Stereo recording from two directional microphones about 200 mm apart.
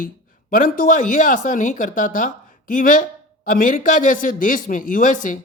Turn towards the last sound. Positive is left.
turn(degrees=40)  # may be behind; listen again after turning